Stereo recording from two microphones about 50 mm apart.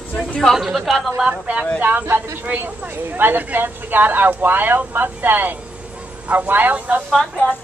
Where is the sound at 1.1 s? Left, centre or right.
Right.